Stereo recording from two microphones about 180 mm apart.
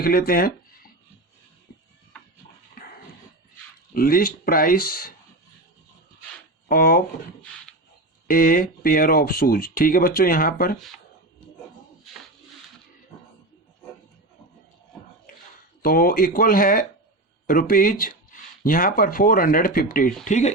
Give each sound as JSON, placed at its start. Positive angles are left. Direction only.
{"t": 0.0, "sound": "speech", "side_deg": 55}
{"t": 2.7, "sound": "dog", "side_deg": 55}
{"t": 3.9, "sound": "speech", "side_deg": 55}
{"t": 6.7, "sound": "speech", "side_deg": 55}
{"t": 8.3, "sound": "speech", "side_deg": 50}
{"t": 15.8, "sound": "speech", "side_deg": 55}